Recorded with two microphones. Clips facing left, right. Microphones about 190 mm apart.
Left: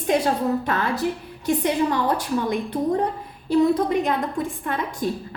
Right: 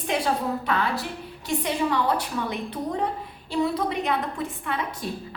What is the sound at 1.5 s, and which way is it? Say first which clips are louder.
A woman's voice: left 4 dB; 50° left (ahead or behind).